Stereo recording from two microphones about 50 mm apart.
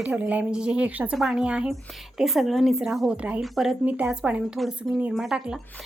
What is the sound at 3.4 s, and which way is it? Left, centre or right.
Speech, centre.